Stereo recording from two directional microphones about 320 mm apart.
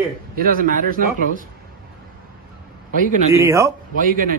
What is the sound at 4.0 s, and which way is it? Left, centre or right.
Speech, right.